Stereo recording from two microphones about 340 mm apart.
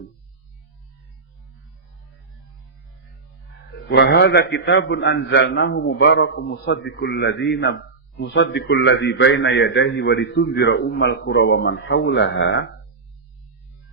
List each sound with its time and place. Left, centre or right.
3.8 s a man's voice: left